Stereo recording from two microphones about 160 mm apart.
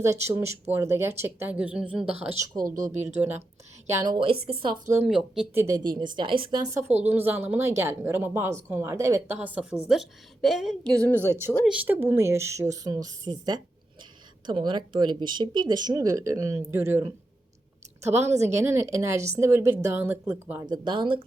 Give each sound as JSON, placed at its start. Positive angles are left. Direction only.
{"t": 0.0, "sound": "speech", "side_deg": -15}
{"t": 2.3, "sound": "speech", "side_deg": -20}
{"t": 2.9, "sound": "speech", "side_deg": -45}
{"t": 3.2, "sound": "speech", "side_deg": -15}
{"t": 3.9, "sound": "a woman's voice", "side_deg": -25}
{"t": 5.0, "sound": "a woman's voice", "side_deg": -5}
{"t": 5.6, "sound": "speech", "side_deg": -25}
{"t": 7.0, "sound": "a woman's voice", "side_deg": -10}
{"t": 11.7, "sound": "speech", "side_deg": -10}
{"t": 14.4, "sound": "speech", "side_deg": -30}
{"t": 20.7, "sound": "speech", "side_deg": -25}